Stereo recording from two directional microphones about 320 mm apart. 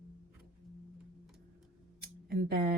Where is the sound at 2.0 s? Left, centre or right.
Right.